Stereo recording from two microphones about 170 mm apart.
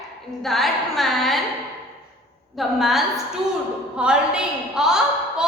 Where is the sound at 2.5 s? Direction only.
Centre (ahead or behind).